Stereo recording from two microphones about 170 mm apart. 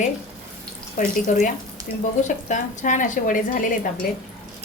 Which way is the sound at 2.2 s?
45° left (ahead or behind).